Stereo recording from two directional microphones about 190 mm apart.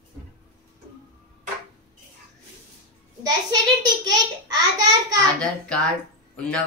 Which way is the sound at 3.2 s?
20° right (ahead or behind).